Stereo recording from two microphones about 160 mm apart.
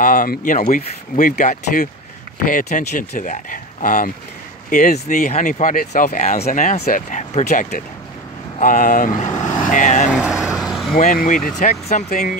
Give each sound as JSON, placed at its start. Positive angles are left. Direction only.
{"t": 0.0, "sound": "speech", "side_deg": 60}
{"t": 9.4, "sound": "vehicle", "side_deg": 50}
{"t": 10.1, "sound": "vehicle", "side_deg": -5}
{"t": 11.0, "sound": "speech", "side_deg": 55}